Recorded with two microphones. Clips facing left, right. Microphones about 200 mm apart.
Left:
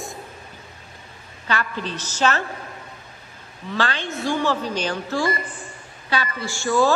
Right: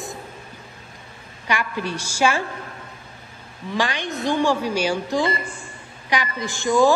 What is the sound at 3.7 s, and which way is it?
A man's voice, 15° right (ahead or behind).